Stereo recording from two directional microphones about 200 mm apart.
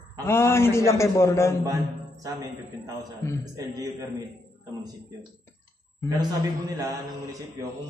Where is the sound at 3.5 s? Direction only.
15° right (ahead or behind).